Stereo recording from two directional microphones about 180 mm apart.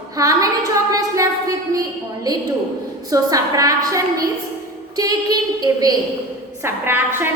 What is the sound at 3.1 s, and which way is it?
A woman's voice, 20° right (ahead or behind).